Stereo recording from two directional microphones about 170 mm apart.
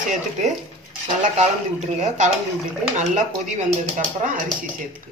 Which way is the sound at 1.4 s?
40° right (ahead or behind).